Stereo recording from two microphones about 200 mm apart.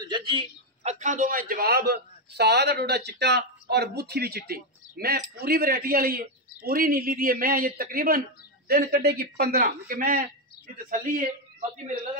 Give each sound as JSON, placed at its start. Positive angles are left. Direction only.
{"t": 0.0, "sound": "a man's voice", "side_deg": -25}